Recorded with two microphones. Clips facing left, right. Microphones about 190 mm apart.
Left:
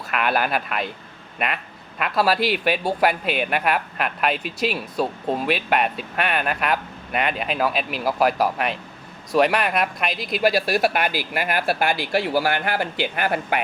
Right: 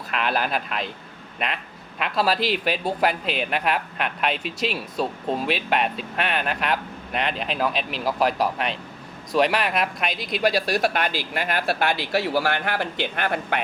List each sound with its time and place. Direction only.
0.3 s a man's voice: 5° left (ahead or behind)
2.1 s a man's voice: centre (ahead or behind)